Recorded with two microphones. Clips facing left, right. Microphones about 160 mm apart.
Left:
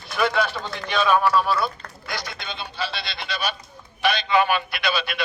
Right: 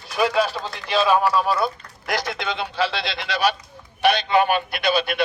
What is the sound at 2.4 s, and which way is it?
Speech, 90° right.